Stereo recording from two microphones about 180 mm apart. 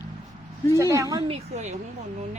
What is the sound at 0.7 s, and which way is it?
Speech, 20° right (ahead or behind).